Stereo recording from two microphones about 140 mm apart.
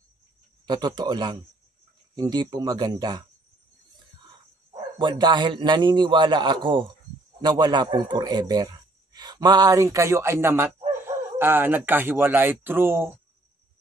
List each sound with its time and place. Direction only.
0.7 s a man's voice: 30° right (ahead or behind)
4.7 s a man's voice: 35° right (ahead or behind); by 13.2 s 15° right (ahead or behind)